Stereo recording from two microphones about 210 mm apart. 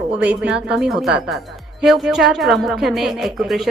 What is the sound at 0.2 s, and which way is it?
A woman's voice, 5° right (ahead or behind).